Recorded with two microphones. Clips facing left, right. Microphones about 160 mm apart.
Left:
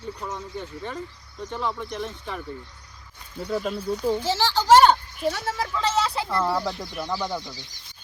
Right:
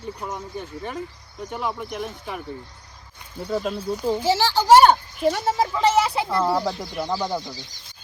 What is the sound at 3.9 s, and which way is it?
Speech, 10° right (ahead or behind).